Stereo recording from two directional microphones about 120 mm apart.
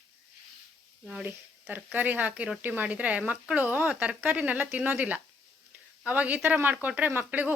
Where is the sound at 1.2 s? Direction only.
15° right (ahead or behind).